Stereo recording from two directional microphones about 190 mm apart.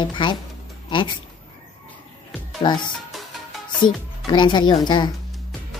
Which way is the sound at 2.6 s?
25° left (ahead or behind).